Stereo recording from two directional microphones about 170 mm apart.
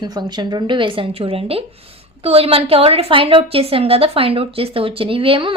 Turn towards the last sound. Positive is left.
turn(degrees=-30)  # may be behind; listen again after turning